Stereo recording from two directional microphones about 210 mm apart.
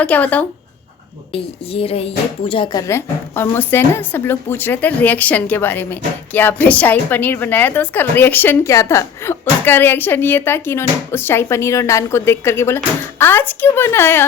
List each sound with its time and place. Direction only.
0.0 s a woman's voice: 5° left (ahead or behind)
1.3 s a sound: 25° left (ahead or behind)
2.5 s a woman's voice: 20° left (ahead or behind)